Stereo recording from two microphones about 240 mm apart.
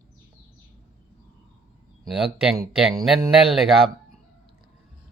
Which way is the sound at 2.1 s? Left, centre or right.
Centre.